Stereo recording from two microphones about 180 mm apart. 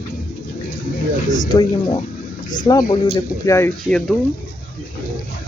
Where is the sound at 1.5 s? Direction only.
25° left (ahead or behind); by 4.1 s 5° left (ahead or behind).